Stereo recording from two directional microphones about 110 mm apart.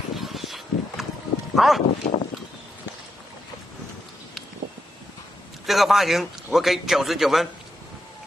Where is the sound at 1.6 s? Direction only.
Centre (ahead or behind).